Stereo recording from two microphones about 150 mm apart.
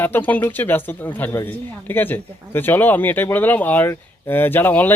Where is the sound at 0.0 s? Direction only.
10° left (ahead or behind).